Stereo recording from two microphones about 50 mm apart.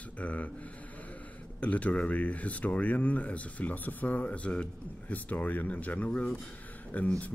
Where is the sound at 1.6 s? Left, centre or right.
Left.